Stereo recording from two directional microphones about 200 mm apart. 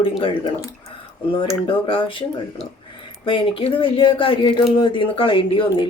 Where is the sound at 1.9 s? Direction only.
25° left (ahead or behind).